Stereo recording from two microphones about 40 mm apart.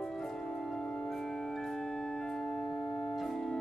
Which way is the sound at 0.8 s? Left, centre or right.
Left.